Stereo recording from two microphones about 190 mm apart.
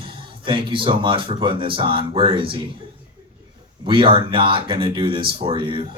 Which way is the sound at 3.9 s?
25° right (ahead or behind).